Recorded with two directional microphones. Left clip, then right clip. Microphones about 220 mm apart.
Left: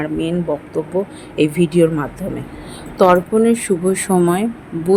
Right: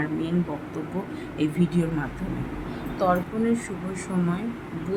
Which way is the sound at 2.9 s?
35° left (ahead or behind).